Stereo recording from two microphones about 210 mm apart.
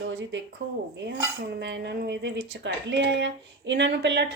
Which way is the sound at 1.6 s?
55° right (ahead or behind).